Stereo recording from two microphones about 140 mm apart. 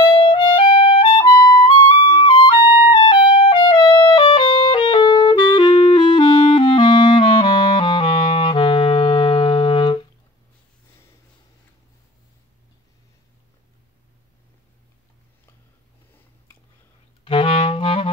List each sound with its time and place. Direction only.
0.0 s music: 35° left (ahead or behind)
17.2 s clarinet: 40° left (ahead or behind)